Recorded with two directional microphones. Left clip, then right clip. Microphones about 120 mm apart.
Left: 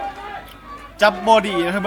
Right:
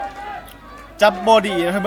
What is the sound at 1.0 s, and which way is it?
Speech, 35° right (ahead or behind).